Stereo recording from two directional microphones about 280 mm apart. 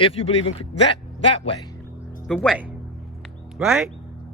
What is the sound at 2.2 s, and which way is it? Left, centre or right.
A man's voice, centre.